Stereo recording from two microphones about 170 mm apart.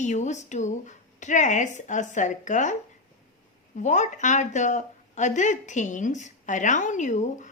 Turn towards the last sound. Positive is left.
turn(degrees=45)  # may be behind; listen again after turning